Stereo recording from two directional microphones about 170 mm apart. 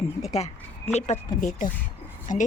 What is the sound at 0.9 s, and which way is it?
Speech, 40° left (ahead or behind).